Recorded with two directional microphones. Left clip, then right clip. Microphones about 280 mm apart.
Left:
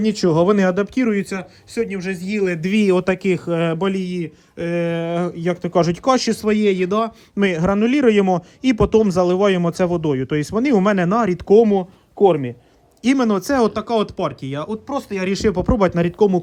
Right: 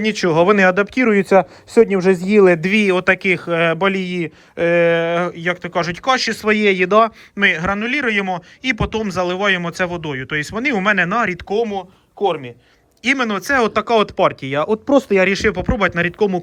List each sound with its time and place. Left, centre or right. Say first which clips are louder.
0.0 s speech: right 2 dB; centre
1.4 s speech: right 12 dB; centre
2.7 s a man's voice: right 3 dB; centre